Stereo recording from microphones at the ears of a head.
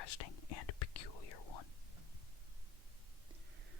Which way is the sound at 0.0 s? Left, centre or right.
Left.